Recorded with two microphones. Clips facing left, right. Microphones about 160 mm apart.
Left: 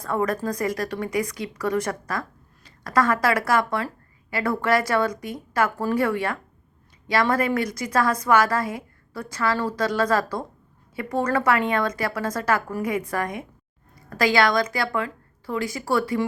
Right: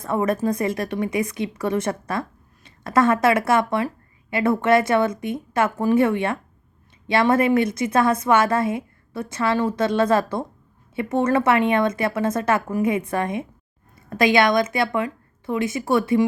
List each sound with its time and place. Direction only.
0.0 s speech: 25° right (ahead or behind)